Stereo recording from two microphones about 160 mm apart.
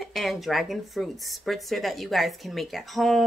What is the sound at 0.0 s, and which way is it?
Speech, centre (ahead or behind).